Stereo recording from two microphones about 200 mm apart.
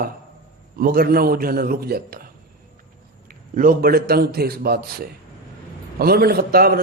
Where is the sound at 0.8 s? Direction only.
50° right (ahead or behind).